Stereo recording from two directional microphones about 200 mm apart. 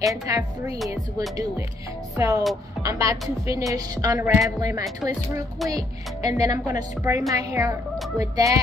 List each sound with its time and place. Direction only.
0.0 s music: 15° right (ahead or behind)
2.1 s music: 15° right (ahead or behind)
5.7 s music: 20° right (ahead or behind)